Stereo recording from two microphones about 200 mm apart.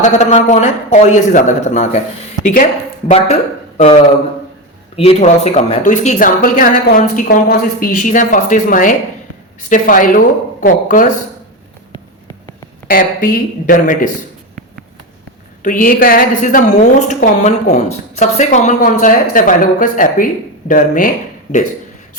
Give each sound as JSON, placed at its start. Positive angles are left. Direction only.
{"t": 0.0, "sound": "a woman's voice", "side_deg": 35}
{"t": 3.1, "sound": "a woman's voice", "side_deg": 30}
{"t": 12.9, "sound": "speech", "side_deg": 45}
{"t": 15.6, "sound": "a woman's voice", "side_deg": 45}